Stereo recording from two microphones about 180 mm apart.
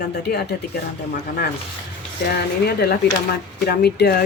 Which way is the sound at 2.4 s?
65° left (ahead or behind).